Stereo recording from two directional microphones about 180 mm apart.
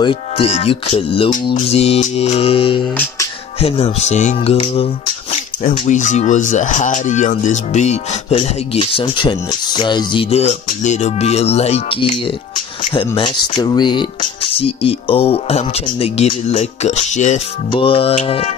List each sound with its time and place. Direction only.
0.0 s speech: 30° left (ahead or behind)
5.3 s a sound: 40° left (ahead or behind)
5.9 s speech: 45° left (ahead or behind)